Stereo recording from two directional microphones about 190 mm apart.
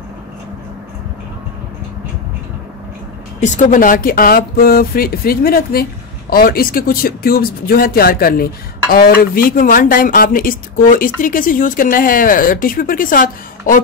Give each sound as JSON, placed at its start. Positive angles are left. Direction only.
{"t": 3.3, "sound": "speech", "side_deg": 40}